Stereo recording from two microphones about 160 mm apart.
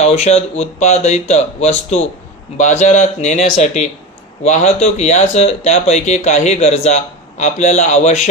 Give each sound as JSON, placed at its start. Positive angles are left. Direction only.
{"t": 0.0, "sound": "speech", "side_deg": 40}